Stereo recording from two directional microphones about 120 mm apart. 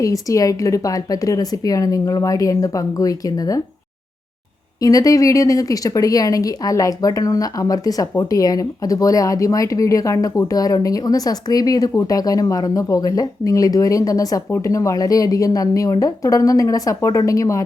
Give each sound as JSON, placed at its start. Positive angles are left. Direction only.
{"t": 0.0, "sound": "speech", "side_deg": 30}
{"t": 4.8, "sound": "speech", "side_deg": 30}